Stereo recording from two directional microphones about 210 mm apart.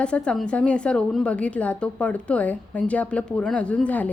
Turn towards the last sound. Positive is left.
turn(degrees=5)  # may be behind; listen again after turning